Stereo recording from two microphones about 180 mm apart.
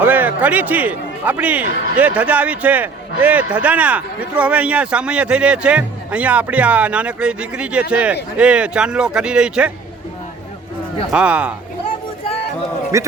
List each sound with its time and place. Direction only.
0.0 s a man's voice: 10° right (ahead or behind)
11.1 s a man's voice: 5° right (ahead or behind)
12.9 s a man's voice: 15° right (ahead or behind)